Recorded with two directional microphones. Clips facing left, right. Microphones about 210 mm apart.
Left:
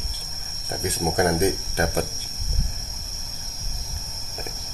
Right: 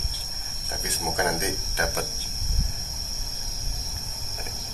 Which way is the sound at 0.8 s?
40° left (ahead or behind).